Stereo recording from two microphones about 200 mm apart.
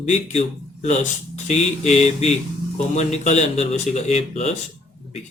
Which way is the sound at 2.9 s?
35° left (ahead or behind).